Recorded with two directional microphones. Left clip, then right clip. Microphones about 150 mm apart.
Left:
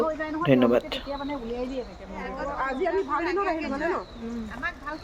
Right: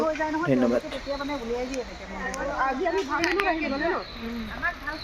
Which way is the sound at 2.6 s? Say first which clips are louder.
Right 1 dB; 20° left (ahead or behind).